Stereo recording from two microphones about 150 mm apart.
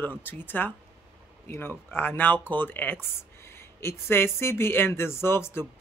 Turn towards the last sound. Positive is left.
turn(degrees=15)  # may be behind; listen again after turning